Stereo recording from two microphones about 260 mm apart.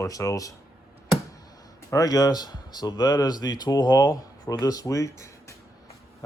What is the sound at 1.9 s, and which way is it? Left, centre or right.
Speech, centre.